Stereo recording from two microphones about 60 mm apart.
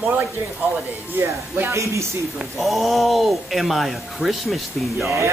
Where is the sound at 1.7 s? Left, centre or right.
Right.